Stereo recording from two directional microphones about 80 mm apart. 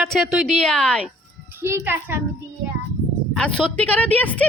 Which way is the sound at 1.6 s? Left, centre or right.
Right.